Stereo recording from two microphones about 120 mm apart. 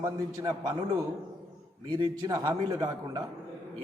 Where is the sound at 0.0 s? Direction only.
30° right (ahead or behind).